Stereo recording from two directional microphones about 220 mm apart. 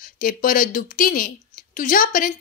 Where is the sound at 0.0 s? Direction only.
40° left (ahead or behind).